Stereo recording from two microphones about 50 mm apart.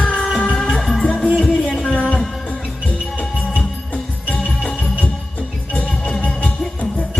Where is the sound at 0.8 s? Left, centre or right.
Centre.